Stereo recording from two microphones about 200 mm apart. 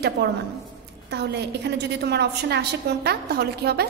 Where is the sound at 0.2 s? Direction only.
50° right (ahead or behind).